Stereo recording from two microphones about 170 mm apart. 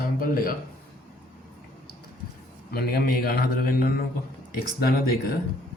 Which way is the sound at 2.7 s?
65° left (ahead or behind).